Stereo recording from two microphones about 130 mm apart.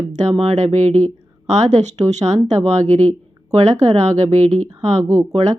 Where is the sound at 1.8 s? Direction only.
60° right (ahead or behind).